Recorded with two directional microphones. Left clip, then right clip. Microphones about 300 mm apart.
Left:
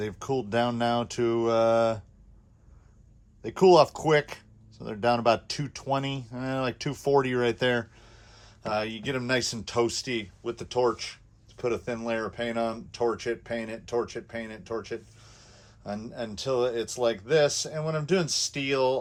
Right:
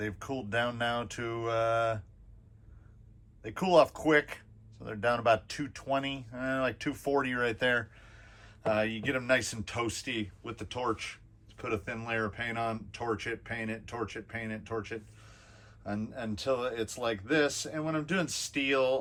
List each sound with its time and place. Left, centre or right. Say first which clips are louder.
0.0 s speech: left 7 dB; centre
3.4 s speech: left 6 dB; left